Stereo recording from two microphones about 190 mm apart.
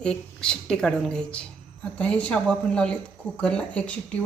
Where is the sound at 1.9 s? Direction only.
5° left (ahead or behind).